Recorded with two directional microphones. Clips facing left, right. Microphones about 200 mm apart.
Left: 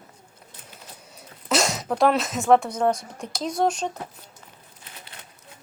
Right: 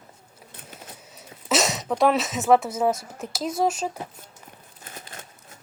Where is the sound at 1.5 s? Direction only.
Centre (ahead or behind).